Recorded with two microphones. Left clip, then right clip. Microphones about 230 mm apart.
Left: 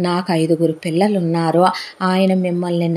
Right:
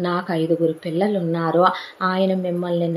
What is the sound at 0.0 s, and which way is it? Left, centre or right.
A woman's voice, left.